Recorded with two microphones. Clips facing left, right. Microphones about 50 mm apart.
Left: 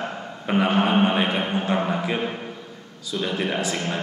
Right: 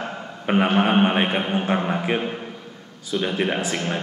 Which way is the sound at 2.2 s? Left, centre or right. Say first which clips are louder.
Even; centre.